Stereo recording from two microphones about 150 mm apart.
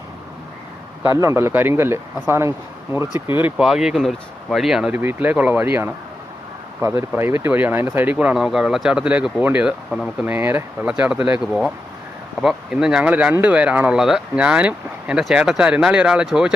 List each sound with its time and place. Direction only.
1.0 s speech: 20° right (ahead or behind)
12.4 s speech: 5° right (ahead or behind)